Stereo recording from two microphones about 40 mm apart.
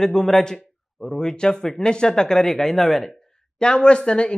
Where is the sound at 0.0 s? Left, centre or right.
Centre.